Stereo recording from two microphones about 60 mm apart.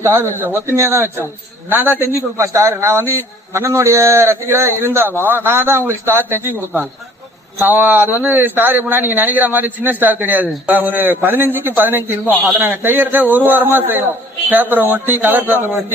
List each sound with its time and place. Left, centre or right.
0.0 s a man's voice: right
0.8 s a man's voice: right
1.7 s a man's voice: right
2.4 s a man's voice: right
7.6 s a man's voice: right